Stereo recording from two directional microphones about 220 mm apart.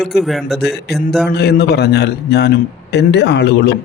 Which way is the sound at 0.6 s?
50° left (ahead or behind).